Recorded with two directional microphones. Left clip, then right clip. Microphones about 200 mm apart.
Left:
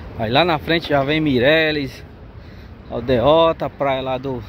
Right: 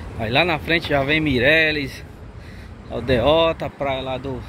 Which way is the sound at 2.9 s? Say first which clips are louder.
Left 2 dB; 15° left (ahead or behind).